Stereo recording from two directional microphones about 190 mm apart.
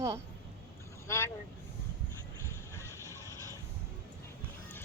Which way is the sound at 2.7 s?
15° left (ahead or behind).